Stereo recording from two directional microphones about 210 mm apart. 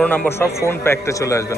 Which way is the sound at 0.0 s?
5° left (ahead or behind).